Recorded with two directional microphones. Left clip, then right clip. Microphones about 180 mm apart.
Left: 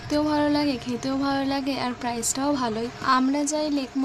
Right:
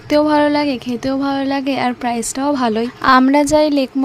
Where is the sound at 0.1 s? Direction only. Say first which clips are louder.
Right 10 dB; 35° right (ahead or behind).